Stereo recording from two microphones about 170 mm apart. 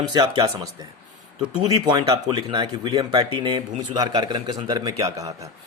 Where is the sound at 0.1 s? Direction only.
25° right (ahead or behind).